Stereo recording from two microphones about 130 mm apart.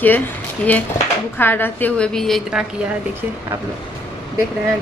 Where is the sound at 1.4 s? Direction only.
15° left (ahead or behind).